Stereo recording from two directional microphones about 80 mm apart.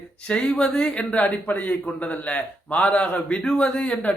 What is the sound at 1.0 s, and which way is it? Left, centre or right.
A man's voice, centre.